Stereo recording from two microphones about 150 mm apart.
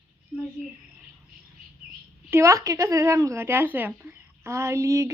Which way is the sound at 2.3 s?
20° right (ahead or behind).